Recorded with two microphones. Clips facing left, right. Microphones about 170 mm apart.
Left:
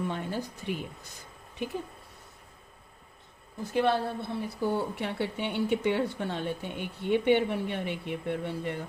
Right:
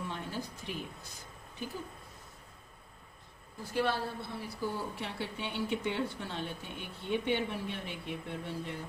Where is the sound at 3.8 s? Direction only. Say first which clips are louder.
Left 6 dB; 60° left (ahead or behind).